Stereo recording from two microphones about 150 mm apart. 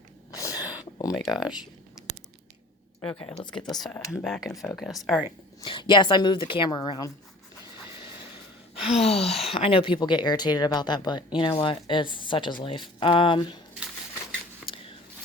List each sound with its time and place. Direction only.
0.3 s a sound: 20° left (ahead or behind)
1.2 s speech: centre (ahead or behind)
3.0 s speech: 10° left (ahead or behind)
5.6 s speech: 30° left (ahead or behind)
9.0 s speech: 45° left (ahead or behind)